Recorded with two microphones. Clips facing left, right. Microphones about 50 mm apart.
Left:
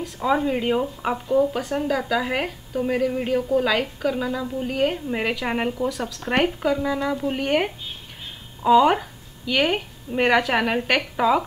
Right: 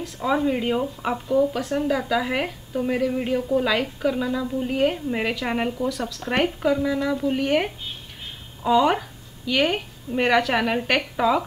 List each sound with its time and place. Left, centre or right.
0.0 s a woman's voice: centre